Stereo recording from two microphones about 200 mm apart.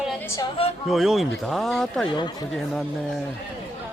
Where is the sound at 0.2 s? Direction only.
15° left (ahead or behind).